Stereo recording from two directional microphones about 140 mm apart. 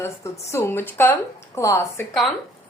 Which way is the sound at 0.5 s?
15° left (ahead or behind).